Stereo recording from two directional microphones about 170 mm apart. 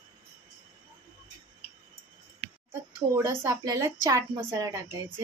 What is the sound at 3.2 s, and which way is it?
Speech, 20° right (ahead or behind).